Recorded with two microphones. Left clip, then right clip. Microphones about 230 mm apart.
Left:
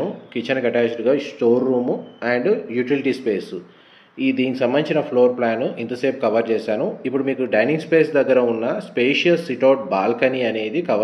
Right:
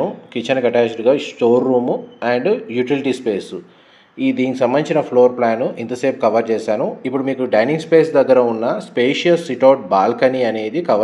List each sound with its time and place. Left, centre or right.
0.3 s speech: right